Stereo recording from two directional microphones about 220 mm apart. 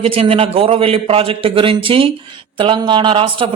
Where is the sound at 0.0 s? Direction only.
25° right (ahead or behind).